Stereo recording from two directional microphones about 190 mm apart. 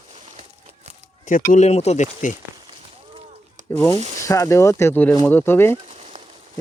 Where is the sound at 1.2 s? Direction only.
45° left (ahead or behind).